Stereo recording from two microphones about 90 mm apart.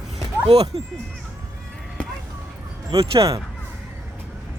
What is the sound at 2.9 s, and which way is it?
Speech, 90° right.